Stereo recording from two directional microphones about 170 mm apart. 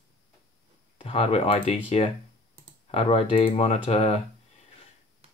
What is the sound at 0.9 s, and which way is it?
Speech, 35° left (ahead or behind).